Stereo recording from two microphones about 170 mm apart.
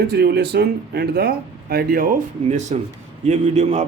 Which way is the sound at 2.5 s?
45° right (ahead or behind).